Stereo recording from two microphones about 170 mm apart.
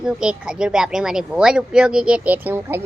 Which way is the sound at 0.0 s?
5° right (ahead or behind).